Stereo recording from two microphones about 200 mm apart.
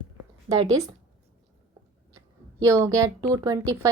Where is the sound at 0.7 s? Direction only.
15° right (ahead or behind).